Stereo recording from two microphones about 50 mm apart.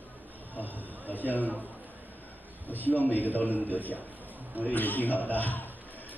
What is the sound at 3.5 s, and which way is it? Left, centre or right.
Speech, right.